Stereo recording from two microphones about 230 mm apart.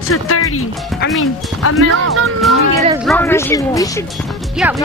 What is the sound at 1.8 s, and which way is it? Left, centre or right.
Speech, right.